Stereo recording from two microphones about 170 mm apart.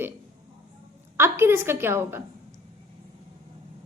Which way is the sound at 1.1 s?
15° right (ahead or behind).